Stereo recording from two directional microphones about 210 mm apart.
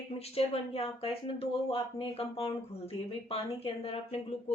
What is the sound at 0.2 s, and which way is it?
Speech, 30° left (ahead or behind).